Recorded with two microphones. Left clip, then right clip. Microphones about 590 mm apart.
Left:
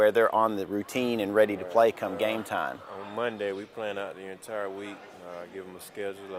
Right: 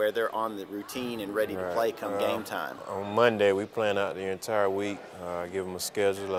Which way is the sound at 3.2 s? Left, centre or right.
Right.